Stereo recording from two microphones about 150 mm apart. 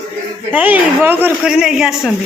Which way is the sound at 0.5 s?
10° right (ahead or behind).